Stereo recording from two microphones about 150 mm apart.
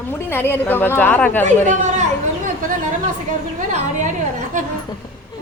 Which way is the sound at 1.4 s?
55° right (ahead or behind).